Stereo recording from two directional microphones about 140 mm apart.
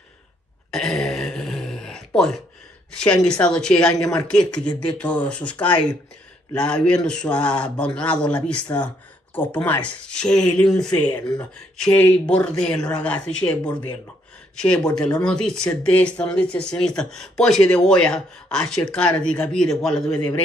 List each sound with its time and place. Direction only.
0.7 s a sound: 5° left (ahead or behind)
2.9 s speech: 5° left (ahead or behind)
11.1 s speech: 30° left (ahead or behind)
11.7 s speech: 5° left (ahead or behind)
14.5 s speech: 5° left (ahead or behind)